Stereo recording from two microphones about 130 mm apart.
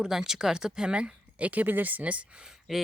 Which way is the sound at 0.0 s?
5° right (ahead or behind).